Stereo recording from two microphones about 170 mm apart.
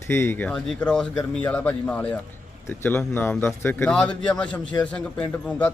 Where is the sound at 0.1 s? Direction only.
15° left (ahead or behind).